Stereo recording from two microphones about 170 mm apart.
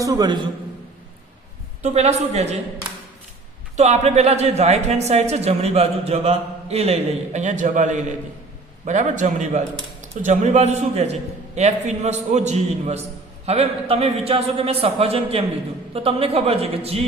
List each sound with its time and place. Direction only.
0.0 s a man's voice: 20° right (ahead or behind)
1.8 s a woman's voice: 40° right (ahead or behind)
3.8 s a woman's voice: 40° right (ahead or behind)